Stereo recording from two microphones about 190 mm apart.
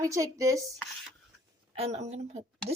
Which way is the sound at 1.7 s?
35° right (ahead or behind).